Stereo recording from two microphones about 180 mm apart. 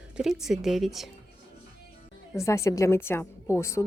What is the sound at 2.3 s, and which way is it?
A woman's voice, 15° left (ahead or behind).